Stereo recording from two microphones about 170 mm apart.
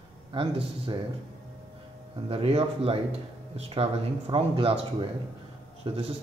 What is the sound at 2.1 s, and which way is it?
A man's voice, 35° right (ahead or behind).